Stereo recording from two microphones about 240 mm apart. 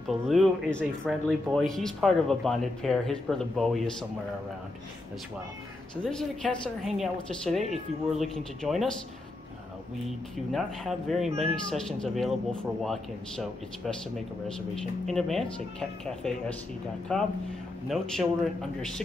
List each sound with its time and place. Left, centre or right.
0.3 s speech: centre
6.0 s speech: centre
10.5 s speech: centre
11.2 s speech: right
11.7 s speech: centre